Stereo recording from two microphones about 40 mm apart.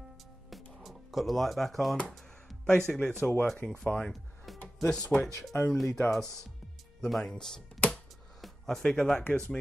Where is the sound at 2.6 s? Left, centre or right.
Centre.